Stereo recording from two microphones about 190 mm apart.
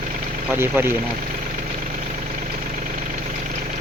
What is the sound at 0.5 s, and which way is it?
Speech, 10° right (ahead or behind).